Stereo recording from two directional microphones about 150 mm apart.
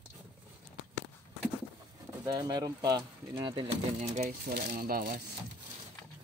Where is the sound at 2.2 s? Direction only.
25° right (ahead or behind).